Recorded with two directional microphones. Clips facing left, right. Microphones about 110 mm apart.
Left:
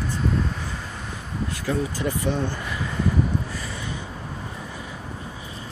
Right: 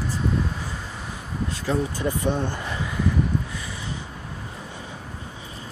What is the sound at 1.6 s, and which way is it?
Speech, 20° right (ahead or behind).